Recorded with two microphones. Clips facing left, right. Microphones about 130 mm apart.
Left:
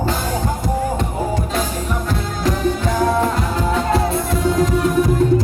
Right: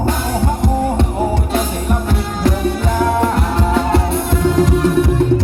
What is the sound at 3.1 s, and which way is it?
Music, 70° right (ahead or behind).